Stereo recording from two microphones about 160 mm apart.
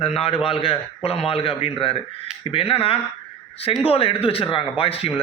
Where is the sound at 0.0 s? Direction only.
40° left (ahead or behind).